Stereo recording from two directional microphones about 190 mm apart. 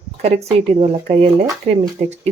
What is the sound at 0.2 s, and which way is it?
Speech, 35° right (ahead or behind).